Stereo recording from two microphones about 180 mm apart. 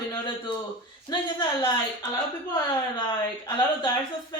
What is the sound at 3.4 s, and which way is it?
Speech, 20° left (ahead or behind).